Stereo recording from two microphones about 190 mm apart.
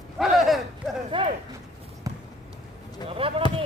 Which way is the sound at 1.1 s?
25° right (ahead or behind).